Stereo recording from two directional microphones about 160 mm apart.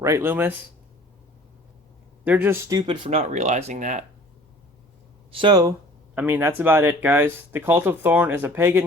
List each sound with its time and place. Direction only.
0.0 s speech: 15° right (ahead or behind)
2.2 s speech: 10° right (ahead or behind)
2.6 s speech: 25° right (ahead or behind); by 4.0 s 50° right (ahead or behind)
5.3 s speech: 30° right (ahead or behind)
6.1 s speech: 10° right (ahead or behind)